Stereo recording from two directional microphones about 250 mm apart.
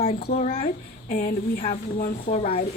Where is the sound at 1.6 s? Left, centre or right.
Left.